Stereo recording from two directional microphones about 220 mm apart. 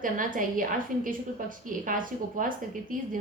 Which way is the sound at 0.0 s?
40° right (ahead or behind).